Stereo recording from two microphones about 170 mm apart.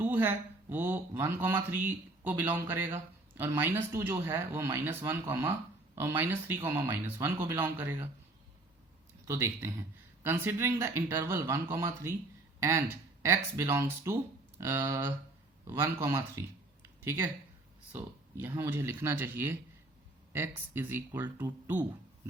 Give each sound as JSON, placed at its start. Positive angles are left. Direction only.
{"t": 0.0, "sound": "speech", "side_deg": -10}
{"t": 9.2, "sound": "speech", "side_deg": -15}
{"t": 18.4, "sound": "speech", "side_deg": -10}